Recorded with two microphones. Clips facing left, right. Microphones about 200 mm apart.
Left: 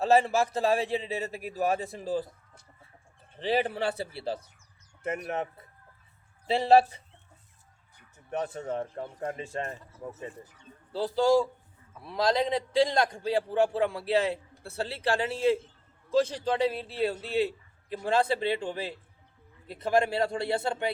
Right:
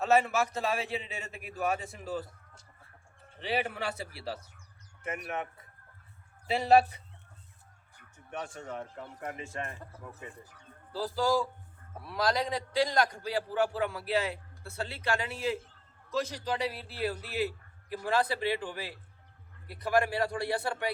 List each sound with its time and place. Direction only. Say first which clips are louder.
0.0 s a man's voice: left 3 dB; 30° left (ahead or behind)
3.4 s a man's voice: left 5 dB; 30° left (ahead or behind)
6.5 s a man's voice: left 3 dB; 30° left (ahead or behind)
8.3 s a man's voice: left 7 dB; 35° left (ahead or behind)